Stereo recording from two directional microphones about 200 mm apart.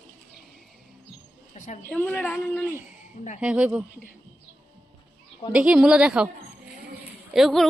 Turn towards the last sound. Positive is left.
turn(degrees=0)  # may be behind; listen again after turning